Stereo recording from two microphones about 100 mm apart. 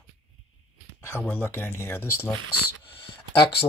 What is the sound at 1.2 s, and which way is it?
Speech, 20° left (ahead or behind).